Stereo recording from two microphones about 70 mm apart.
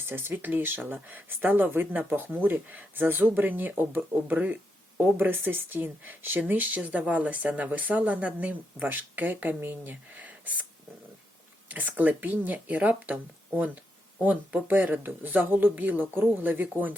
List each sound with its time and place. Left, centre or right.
0.0 s speech: right
11.7 s speech: right
14.2 s speech: right